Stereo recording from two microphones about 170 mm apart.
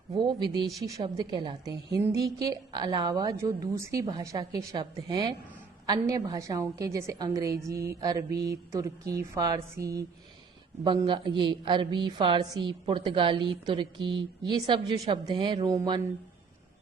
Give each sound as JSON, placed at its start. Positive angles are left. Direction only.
{"t": 0.1, "sound": "a woman's voice", "side_deg": -30}